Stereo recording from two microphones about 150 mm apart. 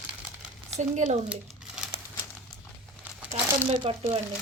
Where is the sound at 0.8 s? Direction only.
50° right (ahead or behind).